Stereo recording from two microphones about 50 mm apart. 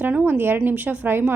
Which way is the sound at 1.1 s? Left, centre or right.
Right.